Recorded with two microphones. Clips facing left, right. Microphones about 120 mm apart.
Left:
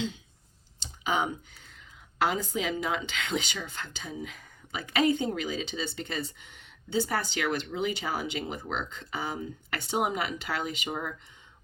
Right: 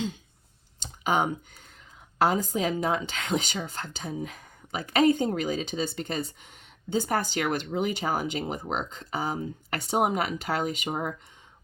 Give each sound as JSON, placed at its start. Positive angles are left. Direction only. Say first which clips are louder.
{"t": 0.8, "sound": "clicking", "louder": "right 3 dB", "side_deg": -45}
{"t": 2.1, "sound": "a woman's voice", "louder": "right 4 dB", "side_deg": -40}